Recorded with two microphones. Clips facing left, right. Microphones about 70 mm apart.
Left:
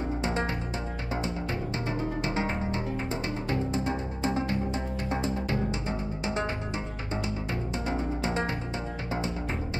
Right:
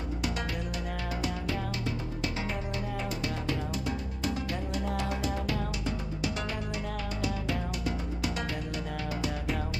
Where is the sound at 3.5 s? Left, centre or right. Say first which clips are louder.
Left 5 dB; left.